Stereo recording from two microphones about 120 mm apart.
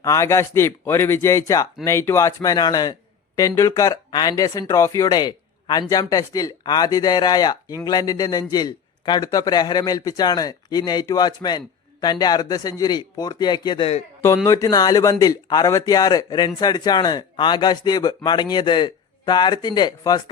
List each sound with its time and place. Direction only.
0.0 s a man's voice: 25° left (ahead or behind)
14.4 s a man's voice: 25° left (ahead or behind)